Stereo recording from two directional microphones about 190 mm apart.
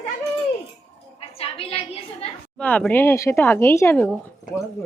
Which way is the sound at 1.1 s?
30° left (ahead or behind).